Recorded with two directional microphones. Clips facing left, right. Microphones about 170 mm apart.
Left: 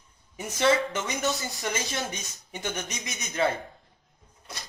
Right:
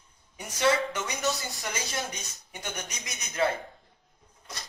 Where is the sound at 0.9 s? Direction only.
20° left (ahead or behind).